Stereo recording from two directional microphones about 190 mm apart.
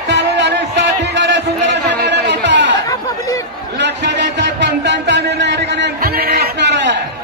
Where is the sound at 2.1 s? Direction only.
65° right (ahead or behind).